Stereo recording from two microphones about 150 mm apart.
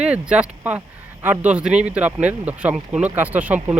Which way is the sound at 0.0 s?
10° right (ahead or behind).